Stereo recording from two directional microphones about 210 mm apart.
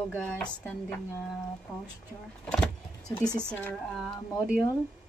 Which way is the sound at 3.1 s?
15° left (ahead or behind).